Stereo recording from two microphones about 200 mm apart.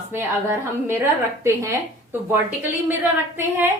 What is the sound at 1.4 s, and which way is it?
Speech, 15° right (ahead or behind).